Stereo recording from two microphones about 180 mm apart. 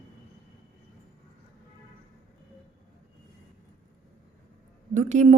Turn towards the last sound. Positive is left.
turn(degrees=-40)  # may be behind; listen again after turning